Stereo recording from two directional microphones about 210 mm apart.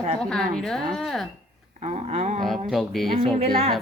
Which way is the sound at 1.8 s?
30° right (ahead or behind).